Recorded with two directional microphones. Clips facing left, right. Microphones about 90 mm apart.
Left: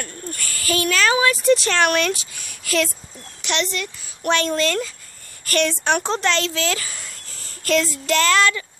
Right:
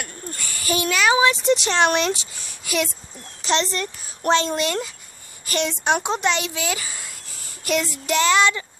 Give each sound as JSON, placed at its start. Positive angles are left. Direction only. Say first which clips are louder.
{"t": 0.0, "sound": "speech", "louder": "left 2 dB", "side_deg": -20}
{"t": 3.4, "sound": "speech", "louder": "right 2 dB", "side_deg": -35}
{"t": 4.4, "sound": "speech", "louder": "left 2 dB", "side_deg": -20}